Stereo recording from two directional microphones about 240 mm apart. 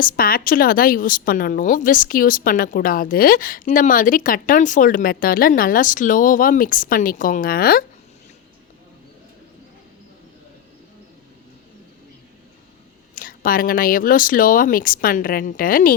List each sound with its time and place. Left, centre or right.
0.0 s speech: left
13.1 s speech: left